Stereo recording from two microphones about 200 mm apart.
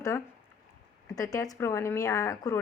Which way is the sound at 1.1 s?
15° left (ahead or behind).